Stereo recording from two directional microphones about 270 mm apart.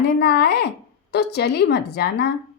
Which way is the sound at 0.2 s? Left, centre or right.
Left.